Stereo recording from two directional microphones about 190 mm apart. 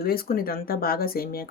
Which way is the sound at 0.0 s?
50° left (ahead or behind).